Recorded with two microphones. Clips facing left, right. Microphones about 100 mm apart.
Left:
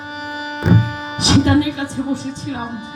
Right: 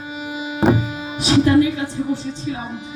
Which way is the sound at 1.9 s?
65° left (ahead or behind).